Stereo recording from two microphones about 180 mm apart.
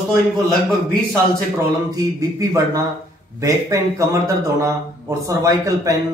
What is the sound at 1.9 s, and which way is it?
A man's voice, 20° right (ahead or behind).